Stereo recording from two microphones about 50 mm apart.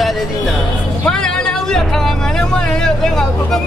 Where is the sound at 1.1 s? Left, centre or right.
Centre.